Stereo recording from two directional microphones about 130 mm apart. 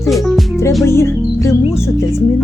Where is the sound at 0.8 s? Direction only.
20° left (ahead or behind).